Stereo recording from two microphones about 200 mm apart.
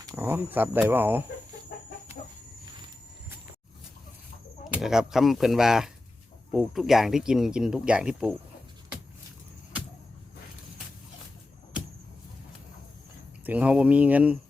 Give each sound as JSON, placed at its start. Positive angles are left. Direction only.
{"t": 0.0, "sound": "speech", "side_deg": -15}
{"t": 4.7, "sound": "speech", "side_deg": -5}
{"t": 13.4, "sound": "speech", "side_deg": -10}